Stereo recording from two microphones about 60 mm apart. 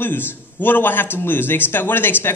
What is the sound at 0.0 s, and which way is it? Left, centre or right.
A man's voice, left.